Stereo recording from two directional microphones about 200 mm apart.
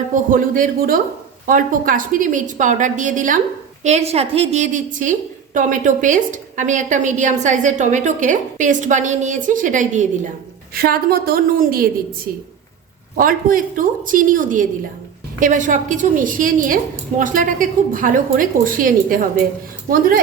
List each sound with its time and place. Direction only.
0.1 s a woman's voice: 40° right (ahead or behind)
13.1 s a woman's voice: 45° right (ahead or behind)